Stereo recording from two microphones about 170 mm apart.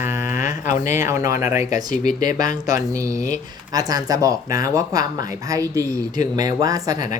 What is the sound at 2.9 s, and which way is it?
Speech, 20° right (ahead or behind).